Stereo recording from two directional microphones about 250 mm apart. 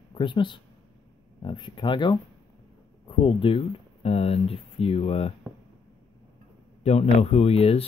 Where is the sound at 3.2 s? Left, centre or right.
Left.